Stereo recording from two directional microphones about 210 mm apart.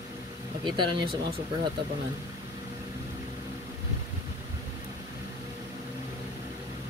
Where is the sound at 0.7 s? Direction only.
20° right (ahead or behind).